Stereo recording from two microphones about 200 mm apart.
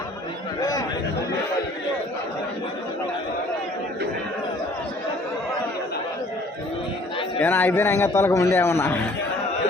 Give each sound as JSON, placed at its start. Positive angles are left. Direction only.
{"t": 0.6, "sound": "chatter", "side_deg": 20}
{"t": 7.3, "sound": "a man's voice", "side_deg": 10}